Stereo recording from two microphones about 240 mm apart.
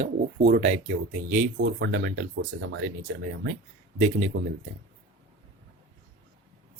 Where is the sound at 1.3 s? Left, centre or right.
Right.